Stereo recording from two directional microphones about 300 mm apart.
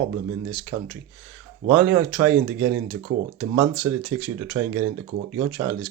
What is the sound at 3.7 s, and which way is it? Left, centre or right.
Speech, right.